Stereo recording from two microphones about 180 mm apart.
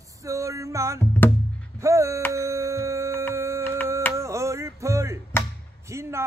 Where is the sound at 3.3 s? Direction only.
15° right (ahead or behind).